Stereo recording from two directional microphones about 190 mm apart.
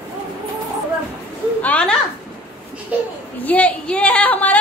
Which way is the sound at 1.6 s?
5° left (ahead or behind).